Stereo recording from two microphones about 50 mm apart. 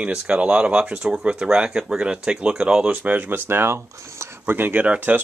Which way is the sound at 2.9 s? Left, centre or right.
Right.